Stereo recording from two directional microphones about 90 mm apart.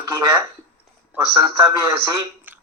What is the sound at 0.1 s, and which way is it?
Speech, 50° right (ahead or behind).